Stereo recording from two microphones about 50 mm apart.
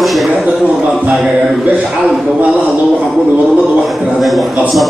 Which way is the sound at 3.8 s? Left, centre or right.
Centre.